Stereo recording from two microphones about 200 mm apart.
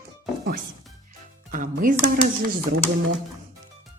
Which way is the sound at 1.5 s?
45° right (ahead or behind).